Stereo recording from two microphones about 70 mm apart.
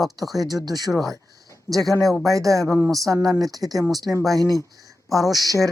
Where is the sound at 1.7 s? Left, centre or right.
Right.